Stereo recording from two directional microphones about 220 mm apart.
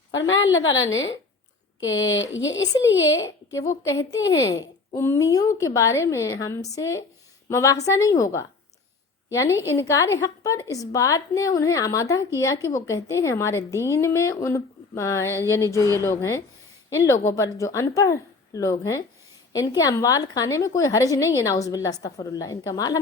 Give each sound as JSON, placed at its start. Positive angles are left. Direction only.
{"t": 0.1, "sound": "a woman's voice", "side_deg": 60}
{"t": 3.2, "sound": "a woman's voice", "side_deg": 15}